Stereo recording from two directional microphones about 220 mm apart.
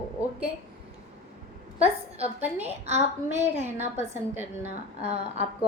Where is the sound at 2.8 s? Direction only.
30° right (ahead or behind).